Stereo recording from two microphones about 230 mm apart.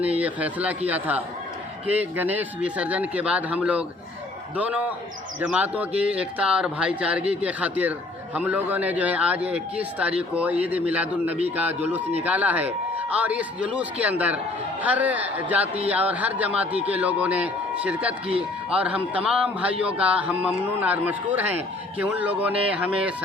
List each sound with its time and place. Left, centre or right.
0.0 s speech: centre